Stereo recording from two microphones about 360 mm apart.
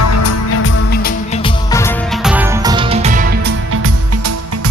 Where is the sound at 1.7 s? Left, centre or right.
Centre.